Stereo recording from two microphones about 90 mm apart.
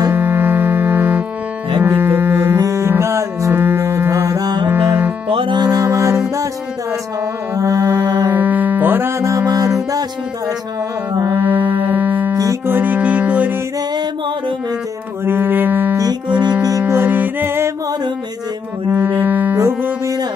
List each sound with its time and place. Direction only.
0.1 s music: 25° right (ahead or behind); by 4.6 s 40° right (ahead or behind)
4.6 s music: 25° right (ahead or behind)
5.3 s music: 75° right (ahead or behind)
5.6 s music: 45° right (ahead or behind)
7.5 s music: 35° right (ahead or behind)
9.2 s music: 35° right (ahead or behind)
11.3 s music: 20° right (ahead or behind)
15.2 s music: 25° right (ahead or behind)
16.0 s music: 50° right (ahead or behind)
16.6 s music: 35° right (ahead or behind)
18.9 s music: 20° right (ahead or behind)
19.6 s music: 30° right (ahead or behind)